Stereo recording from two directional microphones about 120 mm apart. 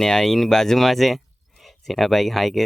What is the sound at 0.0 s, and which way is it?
Speech, 5° left (ahead or behind).